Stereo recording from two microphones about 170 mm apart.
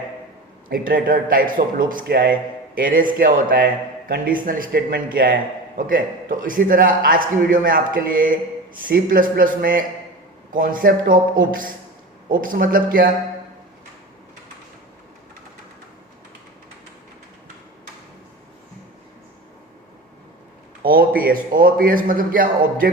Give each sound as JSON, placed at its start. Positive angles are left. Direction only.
{"t": 0.7, "sound": "a man's voice", "side_deg": -55}
{"t": 20.8, "sound": "a man's voice", "side_deg": -60}